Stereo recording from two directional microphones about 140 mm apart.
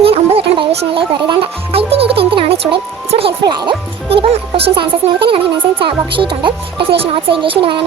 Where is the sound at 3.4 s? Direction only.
30° right (ahead or behind).